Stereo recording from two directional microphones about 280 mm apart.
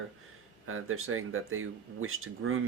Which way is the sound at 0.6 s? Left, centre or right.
Right.